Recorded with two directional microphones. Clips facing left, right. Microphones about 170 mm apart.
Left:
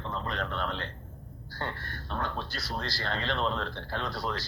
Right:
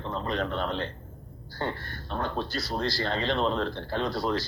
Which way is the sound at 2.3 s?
35° right (ahead or behind).